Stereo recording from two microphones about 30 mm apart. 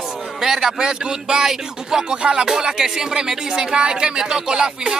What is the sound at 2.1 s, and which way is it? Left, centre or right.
Speech, right.